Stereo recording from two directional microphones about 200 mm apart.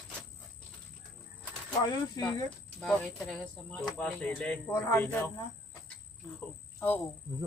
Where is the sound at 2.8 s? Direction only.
5° left (ahead or behind).